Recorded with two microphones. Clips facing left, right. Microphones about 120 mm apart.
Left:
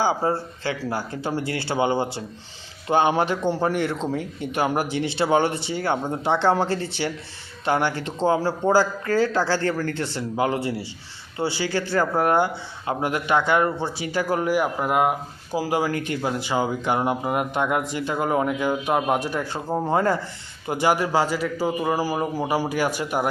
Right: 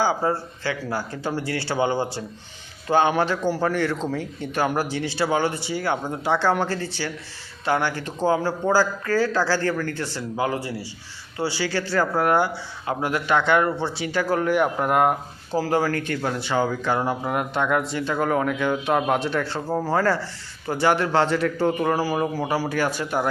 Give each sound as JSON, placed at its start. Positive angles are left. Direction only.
{"t": 0.0, "sound": "a man's voice", "side_deg": 25}
{"t": 15.5, "sound": "speech", "side_deg": 15}